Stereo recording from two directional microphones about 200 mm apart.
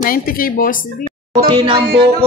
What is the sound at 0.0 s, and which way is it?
Speech, 45° left (ahead or behind).